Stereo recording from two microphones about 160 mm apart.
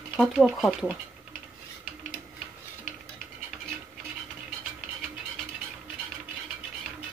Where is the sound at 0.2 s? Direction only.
Centre (ahead or behind).